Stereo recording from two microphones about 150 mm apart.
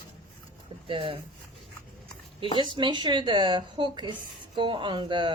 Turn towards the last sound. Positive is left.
turn(degrees=-35)  # may be behind; listen again after turning